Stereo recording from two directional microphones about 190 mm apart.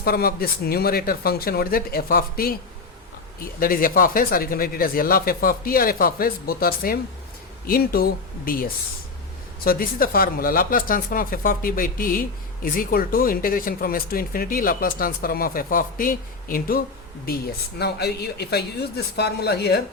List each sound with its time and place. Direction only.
0.0 s speech: 55° left (ahead or behind)
3.6 s a woman's voice: 50° left (ahead or behind)